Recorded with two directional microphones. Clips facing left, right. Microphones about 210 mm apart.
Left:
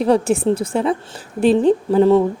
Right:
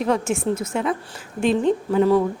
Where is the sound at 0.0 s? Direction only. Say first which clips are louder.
Left 6 dB; 35° left (ahead or behind).